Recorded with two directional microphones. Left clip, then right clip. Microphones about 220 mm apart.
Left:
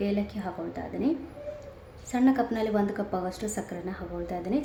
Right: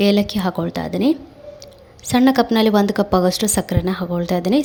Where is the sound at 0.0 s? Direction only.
45° right (ahead or behind).